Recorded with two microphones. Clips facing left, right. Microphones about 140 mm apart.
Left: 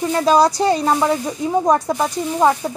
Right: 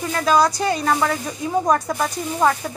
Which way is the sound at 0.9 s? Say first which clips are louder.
Left 4 dB; 20° left (ahead or behind).